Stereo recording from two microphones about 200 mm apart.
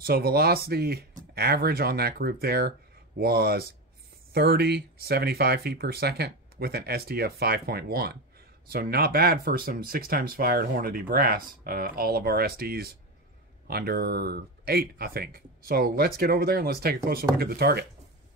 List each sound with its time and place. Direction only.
0.0 s speech: 50° right (ahead or behind)